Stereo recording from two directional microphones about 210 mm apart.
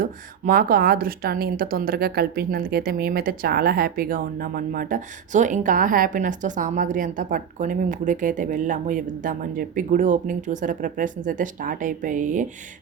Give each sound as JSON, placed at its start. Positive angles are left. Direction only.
{"t": 0.0, "sound": "speech", "side_deg": -40}